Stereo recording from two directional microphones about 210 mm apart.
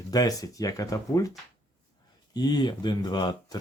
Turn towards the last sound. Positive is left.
turn(degrees=20)  # may be behind; listen again after turning